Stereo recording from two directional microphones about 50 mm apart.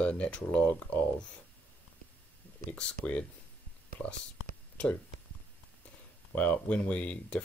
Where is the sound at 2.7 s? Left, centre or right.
Left.